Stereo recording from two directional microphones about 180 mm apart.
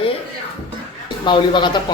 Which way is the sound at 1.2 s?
25° left (ahead or behind).